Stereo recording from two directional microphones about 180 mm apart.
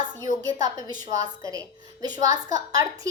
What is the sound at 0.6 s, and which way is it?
A child's voice, 20° right (ahead or behind).